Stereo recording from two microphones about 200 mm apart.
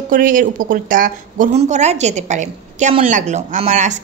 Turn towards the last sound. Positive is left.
turn(degrees=-35)  # may be behind; listen again after turning